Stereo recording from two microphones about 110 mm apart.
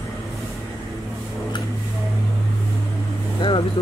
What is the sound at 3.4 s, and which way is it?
Vehicle, 45° left (ahead or behind).